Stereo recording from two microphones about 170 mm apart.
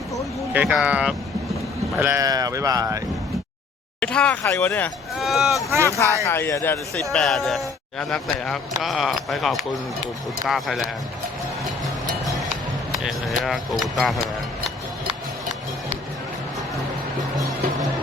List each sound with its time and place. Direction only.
0.5 s speech: 5° right (ahead or behind)
4.0 s speech: 5° left (ahead or behind)
4.7 s speech: centre (ahead or behind)
5.7 s speech: 15° right (ahead or behind)
6.2 s speech: 15° left (ahead or behind)
7.0 s speech: centre (ahead or behind)
12.9 s speech: centre (ahead or behind)